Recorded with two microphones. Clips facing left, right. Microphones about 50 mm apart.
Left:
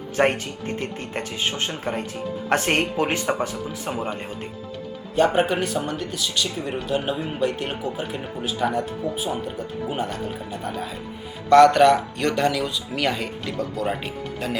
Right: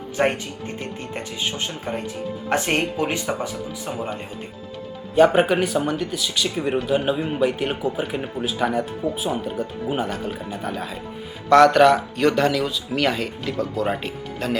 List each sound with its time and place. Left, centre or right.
0.2 s speech: centre
0.8 s speech: left
5.1 s speech: centre